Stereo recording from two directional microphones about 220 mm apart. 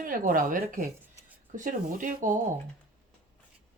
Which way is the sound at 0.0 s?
40° right (ahead or behind).